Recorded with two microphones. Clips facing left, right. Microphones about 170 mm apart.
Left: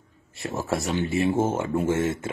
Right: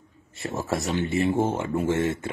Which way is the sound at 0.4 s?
Centre (ahead or behind).